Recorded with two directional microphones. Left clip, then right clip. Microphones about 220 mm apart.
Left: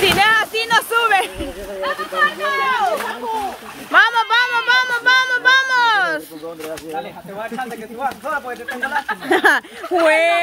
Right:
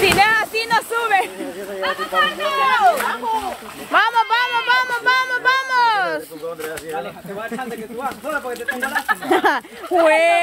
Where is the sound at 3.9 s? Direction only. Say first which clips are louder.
Left 2 dB; 10° left (ahead or behind).